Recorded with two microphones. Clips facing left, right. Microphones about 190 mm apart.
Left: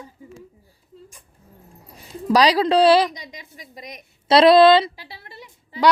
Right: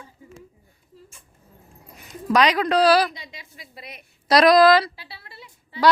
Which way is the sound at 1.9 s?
30° left (ahead or behind).